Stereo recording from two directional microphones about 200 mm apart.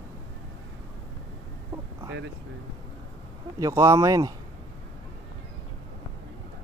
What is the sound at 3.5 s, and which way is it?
Speech, 15° right (ahead or behind).